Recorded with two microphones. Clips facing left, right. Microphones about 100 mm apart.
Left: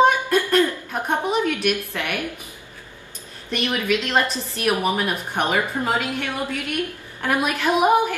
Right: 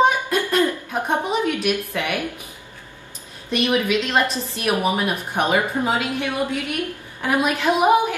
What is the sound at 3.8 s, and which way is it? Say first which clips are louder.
Speech: right 1 dB; centre (ahead or behind).